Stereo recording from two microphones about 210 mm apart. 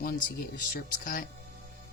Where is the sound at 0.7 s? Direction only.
40° left (ahead or behind).